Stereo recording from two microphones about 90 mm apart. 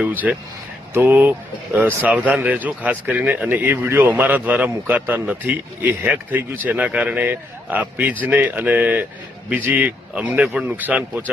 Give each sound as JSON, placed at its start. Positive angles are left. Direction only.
{"t": 0.0, "sound": "speech", "side_deg": -15}